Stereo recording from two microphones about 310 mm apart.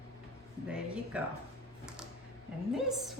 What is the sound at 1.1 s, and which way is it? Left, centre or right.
Speech, centre.